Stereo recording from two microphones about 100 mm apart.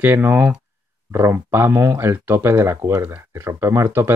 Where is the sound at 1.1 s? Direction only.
30° right (ahead or behind).